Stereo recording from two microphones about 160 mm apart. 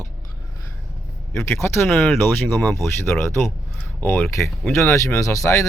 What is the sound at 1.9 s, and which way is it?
Speech, centre (ahead or behind).